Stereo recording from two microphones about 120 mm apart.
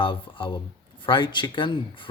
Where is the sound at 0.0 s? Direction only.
45° left (ahead or behind).